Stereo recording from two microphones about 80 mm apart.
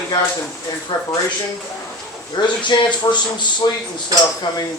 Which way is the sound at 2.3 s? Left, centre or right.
Left.